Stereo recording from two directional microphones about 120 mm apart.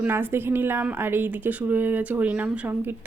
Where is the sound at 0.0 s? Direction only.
20° right (ahead or behind).